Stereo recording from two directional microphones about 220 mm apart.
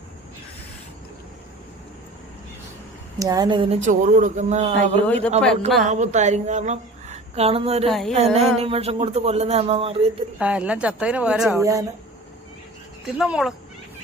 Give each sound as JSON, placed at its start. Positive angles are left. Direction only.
{"t": 3.2, "sound": "speech", "side_deg": -15}
{"t": 5.0, "sound": "speech", "side_deg": 5}
{"t": 5.8, "sound": "a woman's voice", "side_deg": -30}
{"t": 7.9, "sound": "a woman's voice", "side_deg": 0}
{"t": 8.1, "sound": "speech", "side_deg": -30}
{"t": 10.3, "sound": "a woman's voice", "side_deg": -5}
{"t": 11.6, "sound": "speech", "side_deg": -15}
{"t": 13.1, "sound": "a woman's voice", "side_deg": -5}